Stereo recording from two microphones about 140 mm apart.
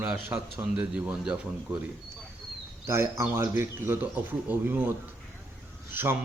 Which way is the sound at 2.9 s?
20° right (ahead or behind).